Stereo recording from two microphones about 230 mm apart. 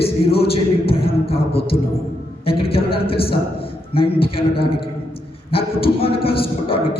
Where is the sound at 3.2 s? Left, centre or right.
Left.